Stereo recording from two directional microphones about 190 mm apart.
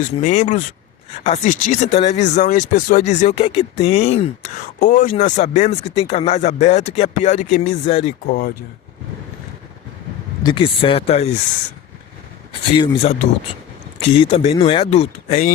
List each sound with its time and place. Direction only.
0.0 s speech: 40° left (ahead or behind)
8.3 s speech: 50° left (ahead or behind)
10.4 s speech: 25° left (ahead or behind)
12.7 s speech: 30° left (ahead or behind)